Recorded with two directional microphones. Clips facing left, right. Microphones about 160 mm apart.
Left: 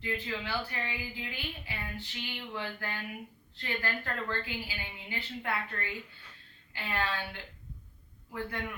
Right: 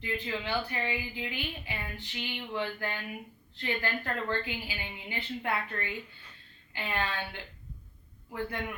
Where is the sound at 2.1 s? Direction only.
20° right (ahead or behind).